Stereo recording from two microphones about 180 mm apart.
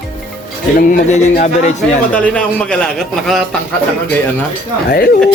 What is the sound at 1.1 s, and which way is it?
Speech, 45° left (ahead or behind).